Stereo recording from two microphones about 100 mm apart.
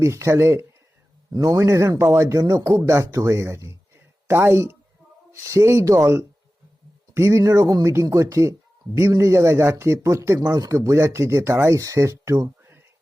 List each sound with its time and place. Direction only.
0.0 s speech: 30° right (ahead or behind)
1.3 s speech: 35° right (ahead or behind)